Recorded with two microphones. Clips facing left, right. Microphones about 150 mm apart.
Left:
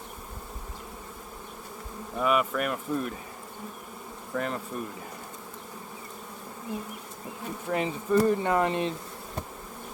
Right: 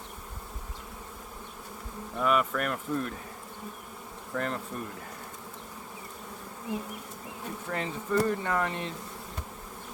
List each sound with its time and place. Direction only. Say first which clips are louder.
2.1 s speech: left 1 dB; 5° left (ahead or behind)
4.4 s speech: left 1 dB; 5° left (ahead or behind)
7.7 s speech: left 5 dB; 15° left (ahead or behind)